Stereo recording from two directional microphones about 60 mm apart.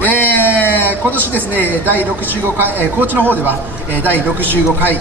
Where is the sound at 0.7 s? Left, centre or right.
Right.